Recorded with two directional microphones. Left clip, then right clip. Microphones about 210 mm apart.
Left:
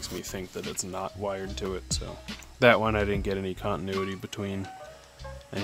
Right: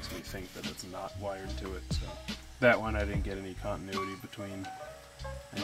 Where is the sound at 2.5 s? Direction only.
55° left (ahead or behind).